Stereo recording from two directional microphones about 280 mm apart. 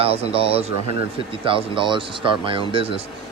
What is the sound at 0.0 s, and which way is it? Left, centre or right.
Speech, right.